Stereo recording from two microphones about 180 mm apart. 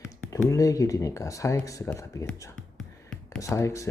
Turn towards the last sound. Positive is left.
turn(degrees=15)  # may be behind; listen again after turning